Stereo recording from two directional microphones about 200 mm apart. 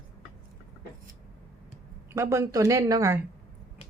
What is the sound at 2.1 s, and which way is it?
Speech, 15° right (ahead or behind).